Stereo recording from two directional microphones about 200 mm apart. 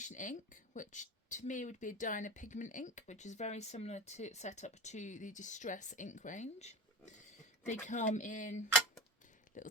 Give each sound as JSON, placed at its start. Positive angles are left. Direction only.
{"t": 0.0, "sound": "speech", "side_deg": 40}